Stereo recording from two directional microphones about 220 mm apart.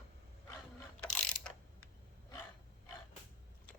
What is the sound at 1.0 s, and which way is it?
Mechanisms, 5° left (ahead or behind).